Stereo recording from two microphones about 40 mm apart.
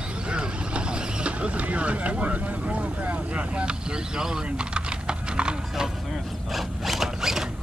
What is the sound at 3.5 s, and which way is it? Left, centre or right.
Typing, right.